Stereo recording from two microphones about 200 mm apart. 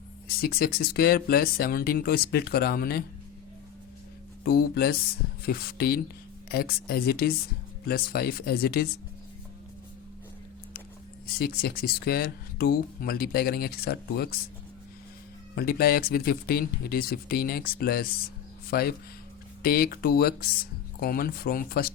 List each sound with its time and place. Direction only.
0.3 s speech: 50° left (ahead or behind)
4.4 s speech: 50° left (ahead or behind)
11.3 s speech: 50° left (ahead or behind)
15.5 s speech: 50° left (ahead or behind)